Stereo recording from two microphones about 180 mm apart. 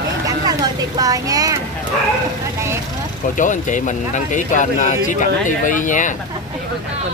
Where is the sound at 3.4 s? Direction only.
45° left (ahead or behind).